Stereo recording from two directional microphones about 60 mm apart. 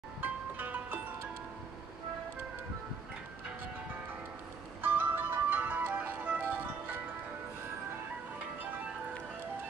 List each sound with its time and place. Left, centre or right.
0.2 s music: right
4.8 s music: right
8.6 s music: right